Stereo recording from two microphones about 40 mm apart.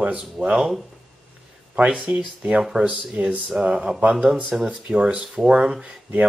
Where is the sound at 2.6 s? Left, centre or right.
Centre.